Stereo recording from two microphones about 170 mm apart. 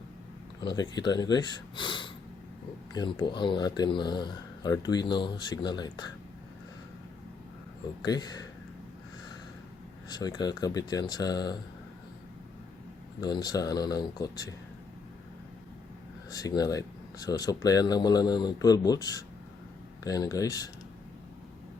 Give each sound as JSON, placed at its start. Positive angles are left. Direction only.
{"t": 0.6, "sound": "speech", "side_deg": 25}
{"t": 8.0, "sound": "speech", "side_deg": 25}
{"t": 10.1, "sound": "speech", "side_deg": 25}
{"t": 13.2, "sound": "speech", "side_deg": 25}
{"t": 16.3, "sound": "speech", "side_deg": 20}